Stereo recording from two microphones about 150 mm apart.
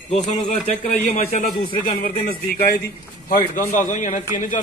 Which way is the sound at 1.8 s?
70° left (ahead or behind).